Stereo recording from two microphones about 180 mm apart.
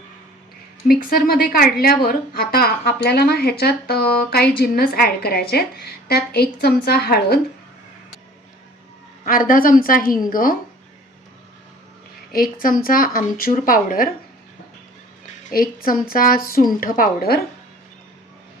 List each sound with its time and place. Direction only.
0.9 s a woman's voice: 55° left (ahead or behind)
9.2 s a woman's voice: 50° left (ahead or behind)
12.3 s a woman's voice: 55° left (ahead or behind)
15.5 s a woman's voice: 50° left (ahead or behind)